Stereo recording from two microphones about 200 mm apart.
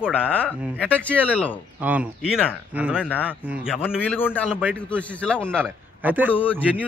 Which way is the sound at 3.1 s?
10° left (ahead or behind).